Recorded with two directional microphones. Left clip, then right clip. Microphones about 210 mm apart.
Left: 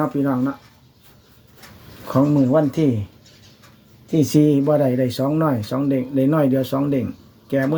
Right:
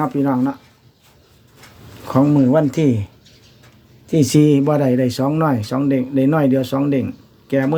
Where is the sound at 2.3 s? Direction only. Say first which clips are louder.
Right 2 dB; 30° right (ahead or behind).